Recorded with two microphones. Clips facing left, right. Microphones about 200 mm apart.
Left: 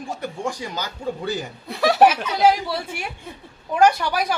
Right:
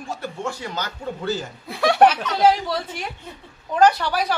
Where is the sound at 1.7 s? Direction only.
Centre (ahead or behind).